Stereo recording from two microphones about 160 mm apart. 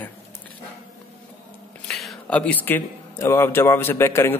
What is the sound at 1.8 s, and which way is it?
A man's voice, 5° left (ahead or behind).